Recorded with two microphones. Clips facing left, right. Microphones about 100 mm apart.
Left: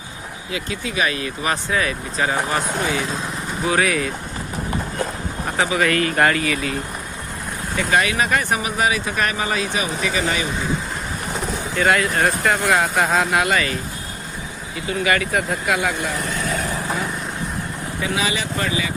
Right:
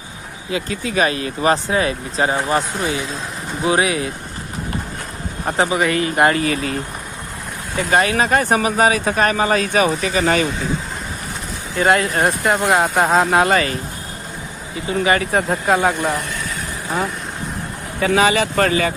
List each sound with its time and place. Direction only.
0.5 s speech: 40° right (ahead or behind)
5.5 s speech: 20° right (ahead or behind)
7.8 s speech: 35° right (ahead or behind)
11.8 s speech: 30° right (ahead or behind)
14.8 s speech: 30° right (ahead or behind)
18.0 s speech: 55° right (ahead or behind)